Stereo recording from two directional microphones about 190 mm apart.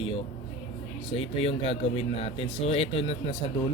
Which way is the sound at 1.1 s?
30° left (ahead or behind).